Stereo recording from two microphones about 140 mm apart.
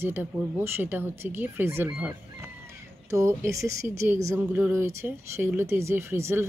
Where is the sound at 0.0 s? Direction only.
15° right (ahead or behind).